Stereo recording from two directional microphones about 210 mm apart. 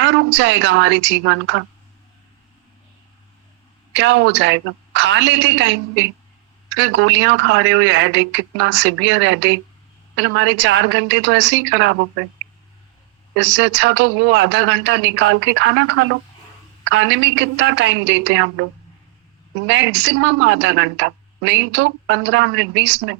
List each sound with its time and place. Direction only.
0.0 s a woman's voice: 60° right (ahead or behind)
3.9 s a woman's voice: 60° right (ahead or behind)
13.3 s a woman's voice: 55° right (ahead or behind)
19.6 s a woman's voice: 60° right (ahead or behind)